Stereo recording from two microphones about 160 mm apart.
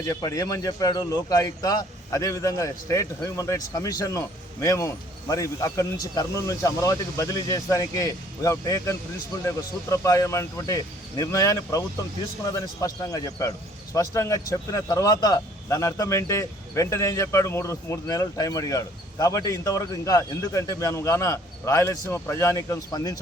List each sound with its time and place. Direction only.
0.0 s a man's voice: 20° left (ahead or behind)